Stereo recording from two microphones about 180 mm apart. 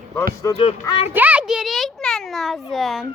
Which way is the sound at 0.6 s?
30° left (ahead or behind).